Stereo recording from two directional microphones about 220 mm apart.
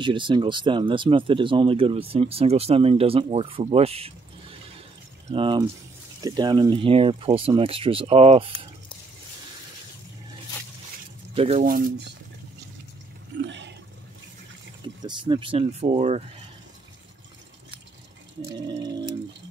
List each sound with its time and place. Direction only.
0.0 s speech: 20° right (ahead or behind)
11.3 s speech: 25° right (ahead or behind)
11.6 s speech: 40° right (ahead or behind)
13.5 s a sound: 55° right (ahead or behind)
15.0 s speech: 20° right (ahead or behind)
18.4 s a sound: 15° right (ahead or behind)